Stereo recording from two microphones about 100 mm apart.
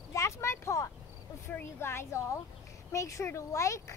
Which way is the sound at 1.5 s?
20° left (ahead or behind).